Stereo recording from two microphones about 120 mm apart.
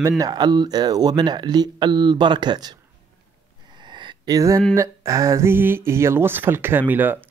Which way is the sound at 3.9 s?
40° right (ahead or behind).